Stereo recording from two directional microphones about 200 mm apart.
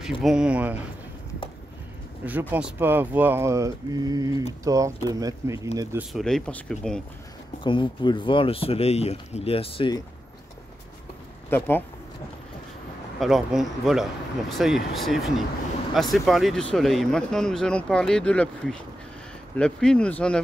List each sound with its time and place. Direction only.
0.2 s speech: 5° right (ahead or behind)
2.2 s speech: 10° right (ahead or behind)
6.1 s speech: 5° left (ahead or behind)
7.6 s speech: 25° left (ahead or behind)
11.5 s speech: 10° left (ahead or behind)
13.2 s speech: centre (ahead or behind)